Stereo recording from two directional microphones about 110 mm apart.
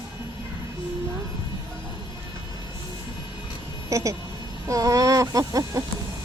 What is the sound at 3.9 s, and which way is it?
Speech, 30° right (ahead or behind).